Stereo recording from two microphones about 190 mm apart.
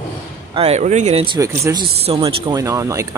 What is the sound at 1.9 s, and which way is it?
Speech, 30° right (ahead or behind).